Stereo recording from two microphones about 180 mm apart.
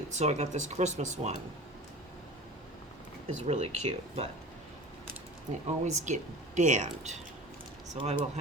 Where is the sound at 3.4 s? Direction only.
40° right (ahead or behind).